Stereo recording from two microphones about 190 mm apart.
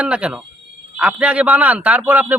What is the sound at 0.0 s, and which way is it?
A man's voice, 5° right (ahead or behind).